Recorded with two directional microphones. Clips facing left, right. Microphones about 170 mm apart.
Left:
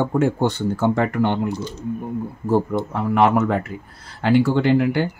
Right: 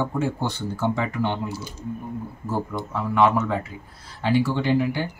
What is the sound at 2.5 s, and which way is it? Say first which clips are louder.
Speech: left 8 dB; 55° left (ahead or behind).